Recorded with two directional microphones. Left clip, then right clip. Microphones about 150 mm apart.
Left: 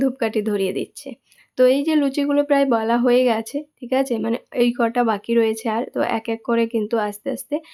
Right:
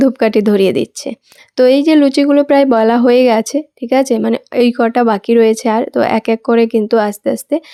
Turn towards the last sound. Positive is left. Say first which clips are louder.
# right 9 dB
turn(degrees=-35)  # may be behind; listen again after turning